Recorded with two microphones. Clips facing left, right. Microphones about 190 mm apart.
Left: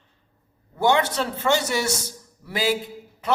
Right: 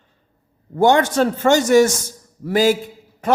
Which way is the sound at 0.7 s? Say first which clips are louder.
Right 6 dB; 45° right (ahead or behind).